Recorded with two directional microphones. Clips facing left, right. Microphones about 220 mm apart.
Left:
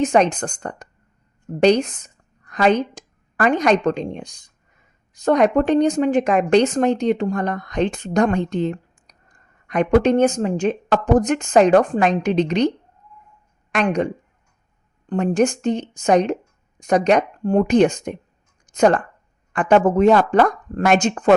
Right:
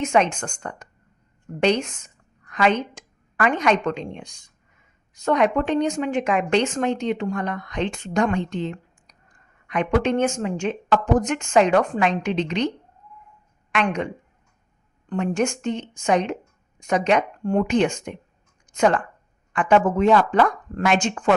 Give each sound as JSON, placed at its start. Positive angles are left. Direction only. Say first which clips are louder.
{"t": 0.0, "sound": "a woman's voice", "louder": "left 4 dB", "side_deg": 35}
{"t": 13.7, "sound": "a woman's voice", "louder": "left 4 dB", "side_deg": 35}
{"t": 15.1, "sound": "a woman's voice", "louder": "left 5 dB", "side_deg": 35}